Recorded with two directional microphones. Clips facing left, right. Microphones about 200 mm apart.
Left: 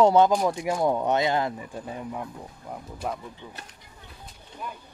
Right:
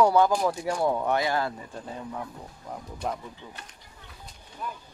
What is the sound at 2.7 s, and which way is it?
Speech, 5° left (ahead or behind).